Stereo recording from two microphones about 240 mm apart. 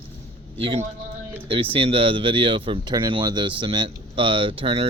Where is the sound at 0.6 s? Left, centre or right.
Right.